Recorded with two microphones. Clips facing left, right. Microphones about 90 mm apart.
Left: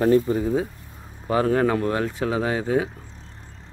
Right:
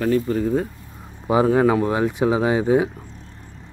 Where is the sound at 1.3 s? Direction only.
10° right (ahead or behind).